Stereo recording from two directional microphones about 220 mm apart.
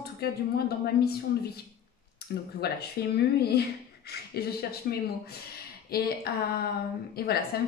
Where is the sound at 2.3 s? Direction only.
50° left (ahead or behind).